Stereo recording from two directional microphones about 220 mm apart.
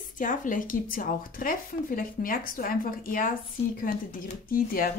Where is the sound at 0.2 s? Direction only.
35° left (ahead or behind).